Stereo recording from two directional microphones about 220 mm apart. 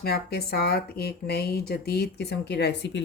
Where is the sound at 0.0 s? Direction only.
45° left (ahead or behind).